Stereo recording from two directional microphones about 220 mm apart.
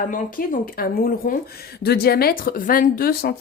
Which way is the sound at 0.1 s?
40° left (ahead or behind).